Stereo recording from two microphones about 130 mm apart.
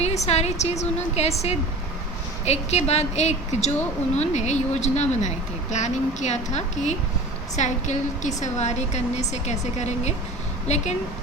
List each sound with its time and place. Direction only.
0.0 s a woman's voice: 55° left (ahead or behind)